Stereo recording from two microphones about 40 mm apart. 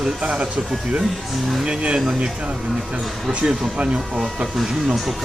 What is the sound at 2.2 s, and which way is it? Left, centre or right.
Speech, right.